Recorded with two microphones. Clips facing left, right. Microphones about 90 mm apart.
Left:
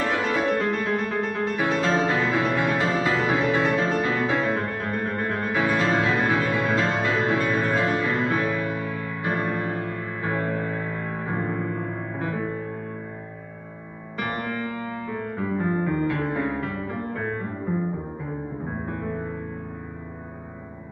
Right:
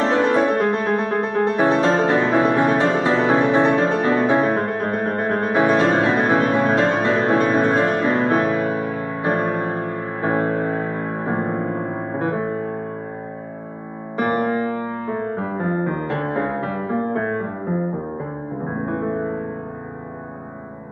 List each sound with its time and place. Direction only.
0.0 s music: 25° right (ahead or behind)
9.5 s music: 40° right (ahead or behind)
14.1 s music: 35° right (ahead or behind)